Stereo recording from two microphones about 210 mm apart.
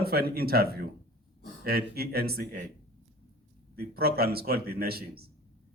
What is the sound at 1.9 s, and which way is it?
Speech, 45° right (ahead or behind).